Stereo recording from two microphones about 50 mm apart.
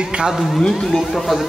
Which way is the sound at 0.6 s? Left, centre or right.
Centre.